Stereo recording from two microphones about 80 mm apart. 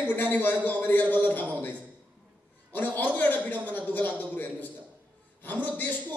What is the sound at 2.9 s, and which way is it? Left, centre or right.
Speech, left.